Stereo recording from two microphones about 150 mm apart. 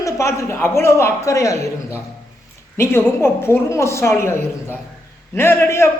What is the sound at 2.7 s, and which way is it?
A woman's voice, 15° left (ahead or behind).